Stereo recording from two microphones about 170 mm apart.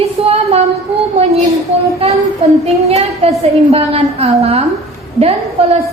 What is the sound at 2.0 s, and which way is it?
A woman's voice, 35° right (ahead or behind).